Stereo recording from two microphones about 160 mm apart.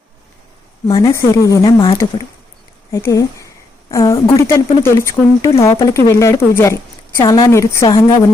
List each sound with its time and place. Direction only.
0.9 s a woman's voice: 25° left (ahead or behind)
6.6 s a sound: 15° left (ahead or behind)
7.2 s speech: 25° left (ahead or behind)